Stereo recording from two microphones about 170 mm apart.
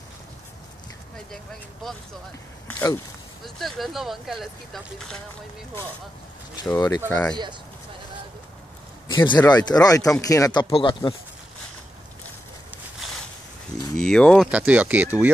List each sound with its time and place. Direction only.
1.1 s speech: 5° left (ahead or behind)
2.7 s speech: 15° left (ahead or behind)
3.4 s speech: centre (ahead or behind)
6.5 s speech: 15° left (ahead or behind)
7.1 s speech: 5° left (ahead or behind)
9.0 s speech: 25° left (ahead or behind)
13.9 s speech: 5° left (ahead or behind)
14.5 s speech: 10° right (ahead or behind)